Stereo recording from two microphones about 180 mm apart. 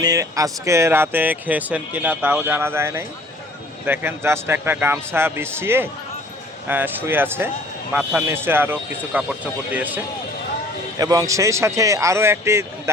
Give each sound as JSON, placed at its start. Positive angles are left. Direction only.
{"t": 0.0, "sound": "speech", "side_deg": -20}
{"t": 10.9, "sound": "speech", "side_deg": -20}